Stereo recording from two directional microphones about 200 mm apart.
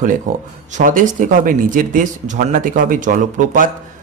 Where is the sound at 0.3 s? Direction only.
40° right (ahead or behind).